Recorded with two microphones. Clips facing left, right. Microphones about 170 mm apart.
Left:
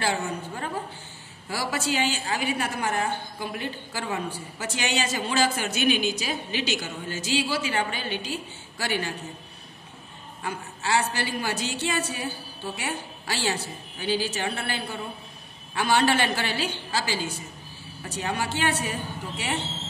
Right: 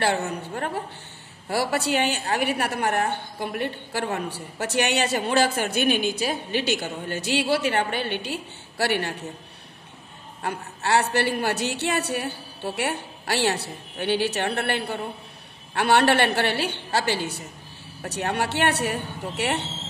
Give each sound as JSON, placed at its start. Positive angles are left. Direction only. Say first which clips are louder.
{"t": 1.5, "sound": "a woman's voice", "louder": "right 4 dB", "side_deg": -60}
{"t": 10.4, "sound": "a woman's voice", "louder": "right 3 dB", "side_deg": -65}